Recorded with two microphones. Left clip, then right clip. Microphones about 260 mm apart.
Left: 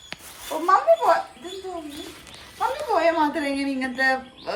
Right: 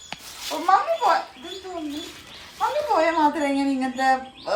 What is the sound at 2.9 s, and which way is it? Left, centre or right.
A woman's voice, centre.